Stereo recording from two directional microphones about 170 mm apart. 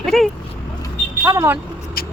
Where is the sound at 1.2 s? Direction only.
20° right (ahead or behind).